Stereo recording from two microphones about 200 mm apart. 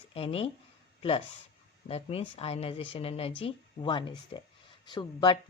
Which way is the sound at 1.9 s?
30° left (ahead or behind).